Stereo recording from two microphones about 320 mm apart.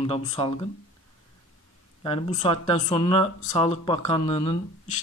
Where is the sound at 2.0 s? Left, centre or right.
Centre.